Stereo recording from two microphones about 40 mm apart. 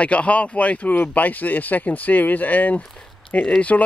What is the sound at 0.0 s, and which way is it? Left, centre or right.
Speech, left.